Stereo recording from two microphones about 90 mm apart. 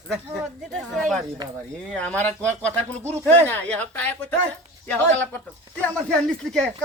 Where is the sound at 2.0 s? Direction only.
15° left (ahead or behind).